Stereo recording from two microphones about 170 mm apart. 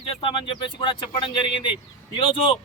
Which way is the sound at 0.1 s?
30° left (ahead or behind).